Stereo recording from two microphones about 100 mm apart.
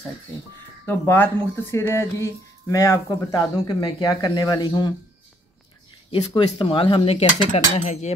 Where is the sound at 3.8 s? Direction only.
45° left (ahead or behind).